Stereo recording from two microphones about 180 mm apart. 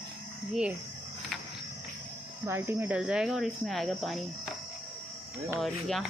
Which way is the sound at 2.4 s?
10° right (ahead or behind).